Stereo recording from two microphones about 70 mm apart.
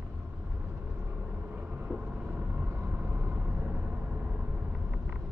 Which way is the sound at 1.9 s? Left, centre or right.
Centre.